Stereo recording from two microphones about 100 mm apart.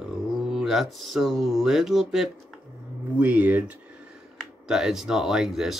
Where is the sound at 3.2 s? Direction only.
15° right (ahead or behind).